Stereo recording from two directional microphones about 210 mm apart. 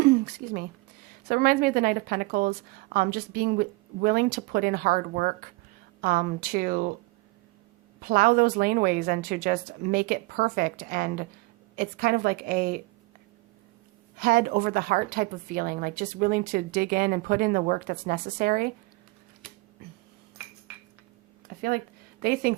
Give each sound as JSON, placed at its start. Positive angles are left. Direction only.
{"t": 0.0, "sound": "a sound", "side_deg": -45}
{"t": 1.3, "sound": "a woman's voice", "side_deg": -45}
{"t": 8.0, "sound": "a woman's voice", "side_deg": -45}
{"t": 14.2, "sound": "a woman's voice", "side_deg": -45}
{"t": 22.2, "sound": "a woman's voice", "side_deg": -45}